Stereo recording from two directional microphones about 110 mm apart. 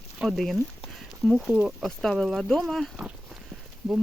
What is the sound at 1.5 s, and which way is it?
Speech, 10° right (ahead or behind).